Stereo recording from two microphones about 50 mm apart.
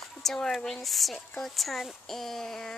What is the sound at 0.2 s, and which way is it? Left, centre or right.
Speech, centre.